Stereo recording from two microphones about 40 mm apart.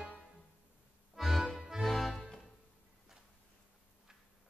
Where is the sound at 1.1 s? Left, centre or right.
Centre.